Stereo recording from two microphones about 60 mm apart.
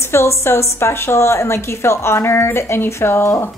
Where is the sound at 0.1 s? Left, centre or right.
Left.